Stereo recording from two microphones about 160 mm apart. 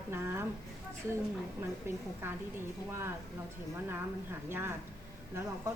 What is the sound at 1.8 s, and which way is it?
Speech, 15° right (ahead or behind).